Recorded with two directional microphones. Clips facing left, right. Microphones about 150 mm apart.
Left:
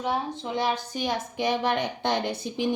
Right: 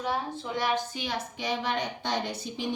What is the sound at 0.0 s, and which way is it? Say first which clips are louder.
Speech: left 3 dB; 20° left (ahead or behind).